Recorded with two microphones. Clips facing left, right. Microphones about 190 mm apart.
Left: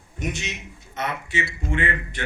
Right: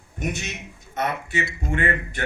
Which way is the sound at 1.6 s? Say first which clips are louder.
Right 2 dB; 40° right (ahead or behind).